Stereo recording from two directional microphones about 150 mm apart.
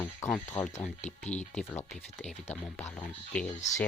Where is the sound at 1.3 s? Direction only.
50° left (ahead or behind).